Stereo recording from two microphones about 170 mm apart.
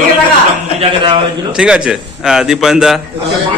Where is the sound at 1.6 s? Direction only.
5° right (ahead or behind).